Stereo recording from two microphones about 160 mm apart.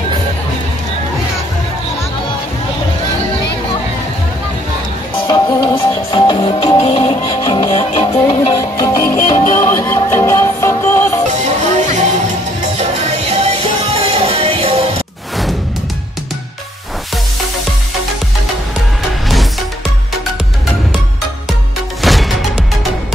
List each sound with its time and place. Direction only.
5.2 s music: 25° left (ahead or behind)
8.5 s music: 25° left (ahead or behind)
11.2 s music: 45° right (ahead or behind)
22.0 s music: centre (ahead or behind)